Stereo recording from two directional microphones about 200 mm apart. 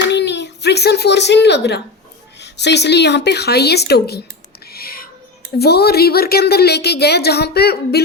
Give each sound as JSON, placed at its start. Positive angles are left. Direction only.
{"t": 0.1, "sound": "a child's voice", "side_deg": 60}
{"t": 4.7, "sound": "music", "side_deg": 50}
{"t": 5.5, "sound": "a woman's voice", "side_deg": 55}